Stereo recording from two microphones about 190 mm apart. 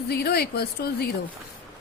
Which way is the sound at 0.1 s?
55° left (ahead or behind).